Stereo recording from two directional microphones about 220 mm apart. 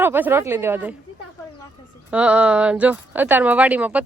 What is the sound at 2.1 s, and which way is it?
Speech, 5° right (ahead or behind).